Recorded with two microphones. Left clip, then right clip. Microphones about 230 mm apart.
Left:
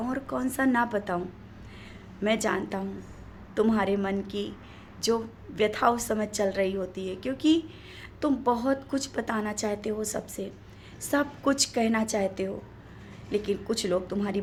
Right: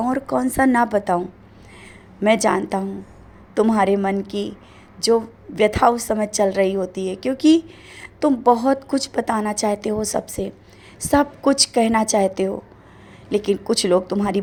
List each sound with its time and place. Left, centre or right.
0.0 s a woman's voice: right
2.2 s a woman's voice: right